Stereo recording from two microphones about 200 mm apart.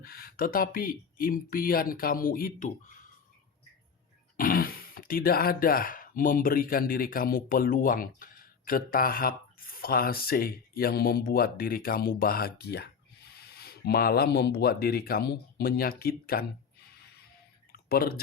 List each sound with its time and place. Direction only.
0.0 s speech: 50° left (ahead or behind)
4.4 s speech: 45° left (ahead or behind)
17.7 s a sound: 50° left (ahead or behind)